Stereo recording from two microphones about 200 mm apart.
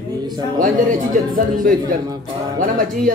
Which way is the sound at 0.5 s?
40° right (ahead or behind).